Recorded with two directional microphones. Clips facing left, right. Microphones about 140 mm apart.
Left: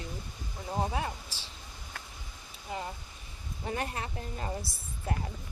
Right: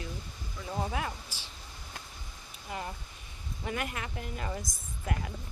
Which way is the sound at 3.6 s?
30° left (ahead or behind).